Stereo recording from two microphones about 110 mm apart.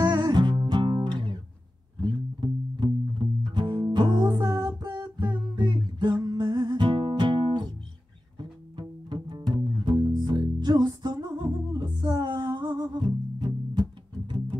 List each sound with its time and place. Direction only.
0.0 s music: 45° right (ahead or behind)
10.1 s music: 40° right (ahead or behind)